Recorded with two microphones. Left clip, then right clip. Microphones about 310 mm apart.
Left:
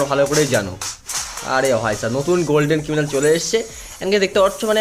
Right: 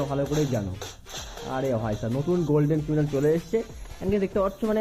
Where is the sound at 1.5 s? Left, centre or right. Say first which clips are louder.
Left 11 dB; centre.